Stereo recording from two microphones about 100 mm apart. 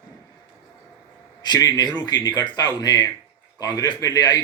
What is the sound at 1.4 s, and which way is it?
A man's voice, 45° left (ahead or behind).